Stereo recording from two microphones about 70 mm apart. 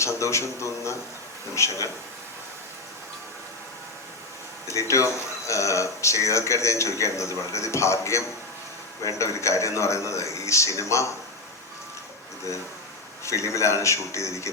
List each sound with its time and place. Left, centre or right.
0.0 s speech: left
4.7 s speech: left
13.2 s speech: left